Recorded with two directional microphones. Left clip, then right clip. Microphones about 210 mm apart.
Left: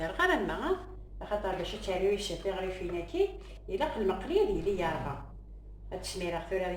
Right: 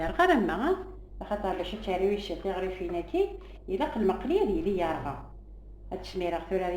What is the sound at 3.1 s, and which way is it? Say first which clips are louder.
A woman's voice: right 1 dB; 50° right (ahead or behind).